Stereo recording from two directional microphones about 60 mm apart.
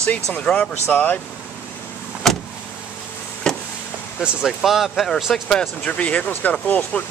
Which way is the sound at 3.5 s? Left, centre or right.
Centre.